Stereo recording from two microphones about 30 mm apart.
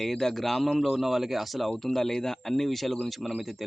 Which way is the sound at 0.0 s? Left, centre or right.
Centre.